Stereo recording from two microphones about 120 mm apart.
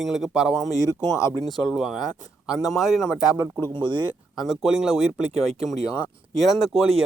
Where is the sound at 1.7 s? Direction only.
Centre (ahead or behind).